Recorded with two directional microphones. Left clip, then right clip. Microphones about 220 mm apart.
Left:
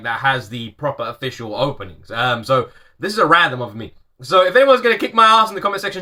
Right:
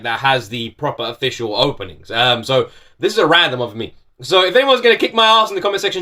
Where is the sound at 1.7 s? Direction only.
Centre (ahead or behind).